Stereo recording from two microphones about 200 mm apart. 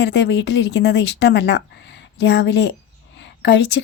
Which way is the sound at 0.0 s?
60° left (ahead or behind).